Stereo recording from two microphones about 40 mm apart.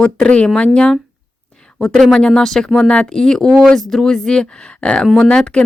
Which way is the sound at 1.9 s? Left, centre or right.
Centre.